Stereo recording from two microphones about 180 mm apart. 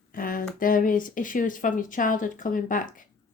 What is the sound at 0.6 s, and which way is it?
Speech, 50° left (ahead or behind).